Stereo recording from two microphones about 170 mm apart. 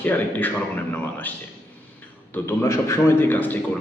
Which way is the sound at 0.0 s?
10° left (ahead or behind).